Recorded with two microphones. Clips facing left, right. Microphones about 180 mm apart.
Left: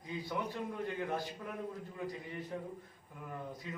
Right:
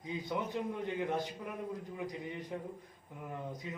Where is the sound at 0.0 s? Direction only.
20° right (ahead or behind).